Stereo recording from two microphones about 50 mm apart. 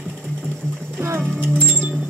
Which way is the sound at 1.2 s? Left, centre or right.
Centre.